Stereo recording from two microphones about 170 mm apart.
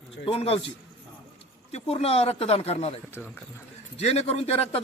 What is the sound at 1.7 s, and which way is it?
A man's voice, 35° left (ahead or behind).